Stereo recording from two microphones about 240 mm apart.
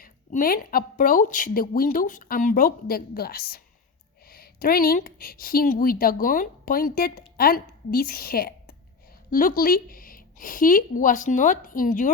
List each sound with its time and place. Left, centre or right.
0.0 s a woman's voice: left